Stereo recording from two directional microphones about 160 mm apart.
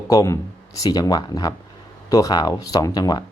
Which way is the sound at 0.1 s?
20° left (ahead or behind).